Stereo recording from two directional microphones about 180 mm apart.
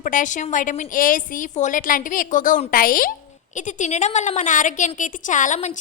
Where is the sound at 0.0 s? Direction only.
45° left (ahead or behind).